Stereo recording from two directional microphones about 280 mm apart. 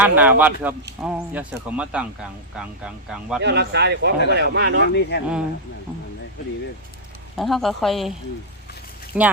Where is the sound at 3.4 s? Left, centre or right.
Right.